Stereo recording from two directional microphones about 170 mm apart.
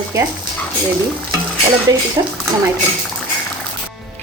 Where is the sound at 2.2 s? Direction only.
25° right (ahead or behind).